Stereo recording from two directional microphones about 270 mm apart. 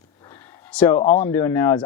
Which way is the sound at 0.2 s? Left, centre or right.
Centre.